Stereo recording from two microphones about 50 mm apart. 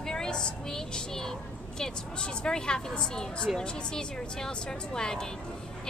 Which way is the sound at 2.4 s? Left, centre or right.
Centre.